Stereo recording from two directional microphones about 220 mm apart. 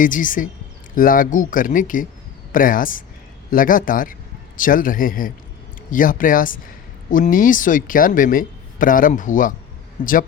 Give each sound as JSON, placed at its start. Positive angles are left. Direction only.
{"t": 0.0, "sound": "a man's voice", "side_deg": 35}